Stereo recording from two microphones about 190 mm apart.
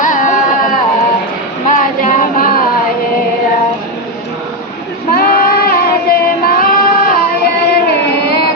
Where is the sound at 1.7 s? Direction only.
45° left (ahead or behind).